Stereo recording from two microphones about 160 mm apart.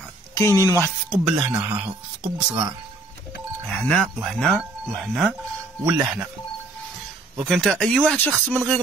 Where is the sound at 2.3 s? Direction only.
30° right (ahead or behind).